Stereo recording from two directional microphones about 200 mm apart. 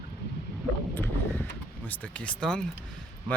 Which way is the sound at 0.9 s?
10° left (ahead or behind).